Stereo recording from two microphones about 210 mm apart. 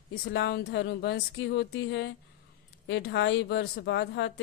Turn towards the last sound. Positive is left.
turn(degrees=55)  # may be behind; listen again after turning